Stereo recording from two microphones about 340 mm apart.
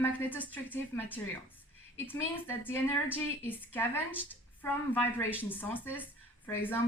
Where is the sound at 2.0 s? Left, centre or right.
Centre.